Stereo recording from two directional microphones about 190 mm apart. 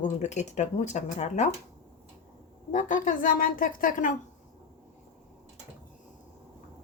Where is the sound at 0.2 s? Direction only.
35° left (ahead or behind).